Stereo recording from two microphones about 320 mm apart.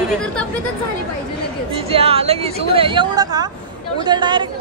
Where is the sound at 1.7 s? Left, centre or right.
Centre.